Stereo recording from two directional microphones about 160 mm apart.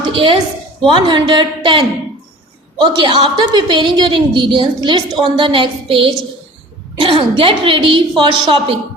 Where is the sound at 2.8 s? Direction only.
30° right (ahead or behind).